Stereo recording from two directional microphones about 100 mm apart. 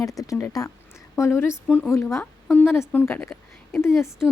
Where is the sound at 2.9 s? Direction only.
20° left (ahead or behind).